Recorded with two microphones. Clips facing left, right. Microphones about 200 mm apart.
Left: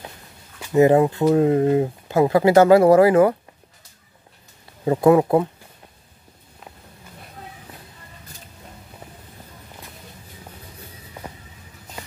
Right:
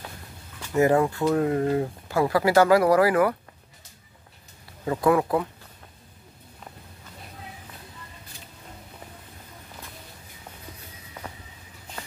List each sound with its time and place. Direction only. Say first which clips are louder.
0.6 s speech: left 6 dB; 20° left (ahead or behind)
4.8 s speech: left 6 dB; 25° left (ahead or behind)